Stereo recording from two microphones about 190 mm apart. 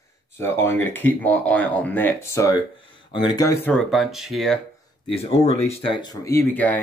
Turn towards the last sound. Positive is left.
turn(degrees=10)  # may be behind; listen again after turning